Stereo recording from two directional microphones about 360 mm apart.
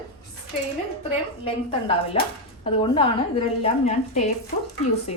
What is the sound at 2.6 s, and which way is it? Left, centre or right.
A woman's voice, centre.